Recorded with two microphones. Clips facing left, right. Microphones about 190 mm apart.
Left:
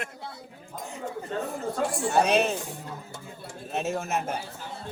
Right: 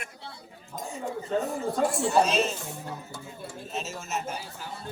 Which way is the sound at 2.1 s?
60° left (ahead or behind).